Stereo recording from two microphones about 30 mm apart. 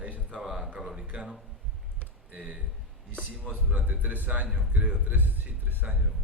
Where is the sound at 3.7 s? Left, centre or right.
Right.